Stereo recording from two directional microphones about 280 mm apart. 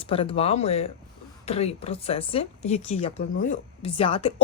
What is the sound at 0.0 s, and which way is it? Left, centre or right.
A woman's voice, centre.